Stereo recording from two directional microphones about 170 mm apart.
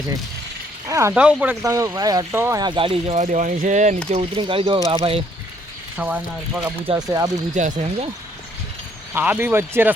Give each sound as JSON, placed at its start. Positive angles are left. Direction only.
{"t": 0.9, "sound": "speech", "side_deg": -15}
{"t": 1.1, "sound": "speech", "side_deg": -5}
{"t": 1.6, "sound": "speech", "side_deg": -20}
{"t": 4.1, "sound": "speech", "side_deg": -35}
{"t": 6.0, "sound": "speech", "side_deg": -10}
{"t": 6.8, "sound": "speech", "side_deg": -20}
{"t": 7.5, "sound": "speech", "side_deg": -45}
{"t": 9.1, "sound": "speech", "side_deg": -10}